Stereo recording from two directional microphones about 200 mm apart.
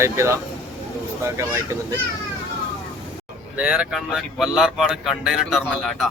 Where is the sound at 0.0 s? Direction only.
15° right (ahead or behind).